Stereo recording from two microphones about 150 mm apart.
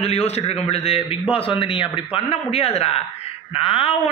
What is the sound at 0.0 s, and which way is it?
A man's voice, 45° left (ahead or behind).